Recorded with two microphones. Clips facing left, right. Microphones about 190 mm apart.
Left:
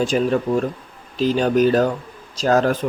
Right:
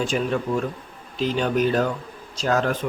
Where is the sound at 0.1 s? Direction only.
40° left (ahead or behind).